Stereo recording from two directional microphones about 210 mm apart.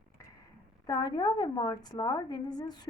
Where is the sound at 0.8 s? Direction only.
20° left (ahead or behind).